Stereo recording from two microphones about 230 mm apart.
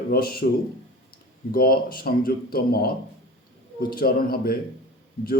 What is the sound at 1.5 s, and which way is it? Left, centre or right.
A man's voice, left.